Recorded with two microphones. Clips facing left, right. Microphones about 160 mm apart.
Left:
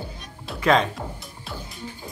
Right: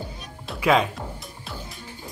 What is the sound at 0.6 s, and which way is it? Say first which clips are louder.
Speech: even; 5° right (ahead or behind).